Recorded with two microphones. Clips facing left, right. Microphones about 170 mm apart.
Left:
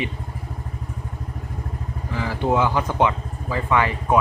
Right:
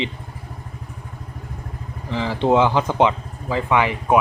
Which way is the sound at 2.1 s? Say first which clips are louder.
Right 4 dB; 25° right (ahead or behind).